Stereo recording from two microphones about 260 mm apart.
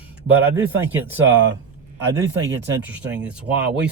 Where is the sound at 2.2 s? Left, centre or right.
Centre.